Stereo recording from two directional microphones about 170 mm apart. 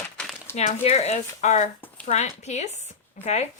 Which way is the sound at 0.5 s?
40° left (ahead or behind).